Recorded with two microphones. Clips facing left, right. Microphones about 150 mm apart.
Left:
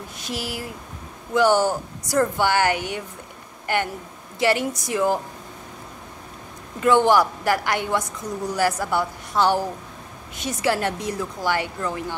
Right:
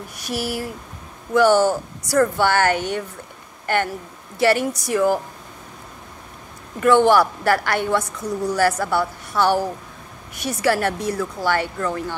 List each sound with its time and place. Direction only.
0.2 s a woman's voice: 20° left (ahead or behind)
7.1 s a woman's voice: 15° left (ahead or behind)